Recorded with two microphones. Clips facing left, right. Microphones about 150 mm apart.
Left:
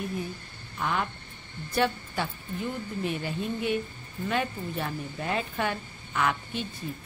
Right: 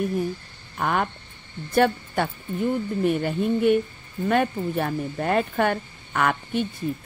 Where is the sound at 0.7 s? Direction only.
55° right (ahead or behind).